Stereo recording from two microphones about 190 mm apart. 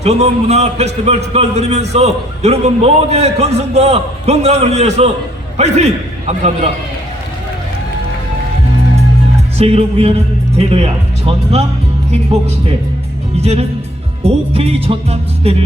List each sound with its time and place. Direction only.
0.0 s speech: 35° right (ahead or behind)
9.6 s speech: 30° right (ahead or behind)
13.3 s speech: 35° right (ahead or behind)